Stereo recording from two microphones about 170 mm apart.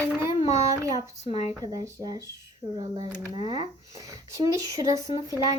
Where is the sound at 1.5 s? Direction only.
20° right (ahead or behind).